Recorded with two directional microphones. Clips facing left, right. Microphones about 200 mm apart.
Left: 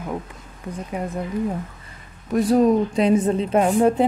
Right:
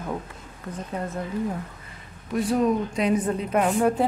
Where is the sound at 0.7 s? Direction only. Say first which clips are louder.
Left 3 dB; 15° left (ahead or behind).